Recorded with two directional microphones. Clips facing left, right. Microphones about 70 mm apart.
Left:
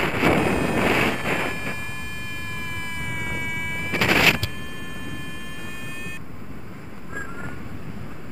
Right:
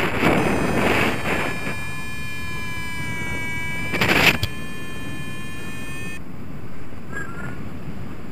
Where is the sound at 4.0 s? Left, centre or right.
Right.